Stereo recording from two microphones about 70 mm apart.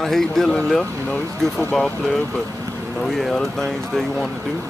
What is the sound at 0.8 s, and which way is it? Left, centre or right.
Speech, centre.